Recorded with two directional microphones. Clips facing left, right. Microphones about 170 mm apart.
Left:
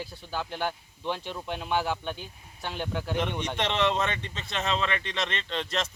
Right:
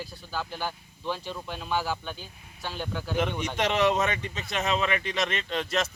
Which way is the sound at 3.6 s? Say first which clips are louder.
Right 3 dB; 10° right (ahead or behind).